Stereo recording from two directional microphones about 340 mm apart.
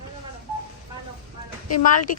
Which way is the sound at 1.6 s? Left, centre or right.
Left.